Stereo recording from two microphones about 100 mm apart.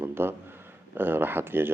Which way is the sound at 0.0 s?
25° right (ahead or behind).